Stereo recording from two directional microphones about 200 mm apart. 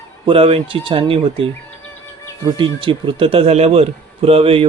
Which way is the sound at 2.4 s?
25° right (ahead or behind).